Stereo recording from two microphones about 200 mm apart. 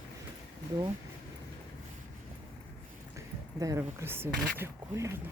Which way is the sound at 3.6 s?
15° right (ahead or behind).